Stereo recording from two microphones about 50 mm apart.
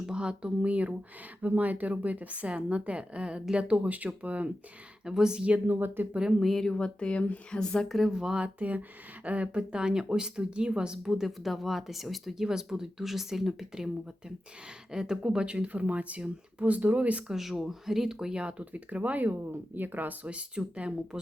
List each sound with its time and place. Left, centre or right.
0.0 s speech: centre
5.0 s speech: centre
5.6 s speech: right
6.4 s speech: centre
6.7 s speech: centre
7.9 s speech: centre
8.5 s speech: right
17.2 s speech: centre
18.6 s speech: right
20.2 s speech: right